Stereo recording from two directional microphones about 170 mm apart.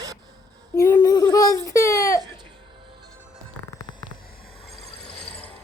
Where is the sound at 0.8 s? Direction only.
25° left (ahead or behind).